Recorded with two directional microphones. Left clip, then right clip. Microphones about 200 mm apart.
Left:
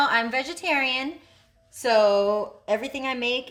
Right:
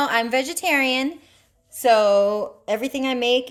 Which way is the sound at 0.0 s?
55° right (ahead or behind).